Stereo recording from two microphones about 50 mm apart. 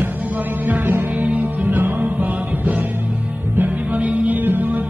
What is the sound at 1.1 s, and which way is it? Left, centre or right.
Music, right.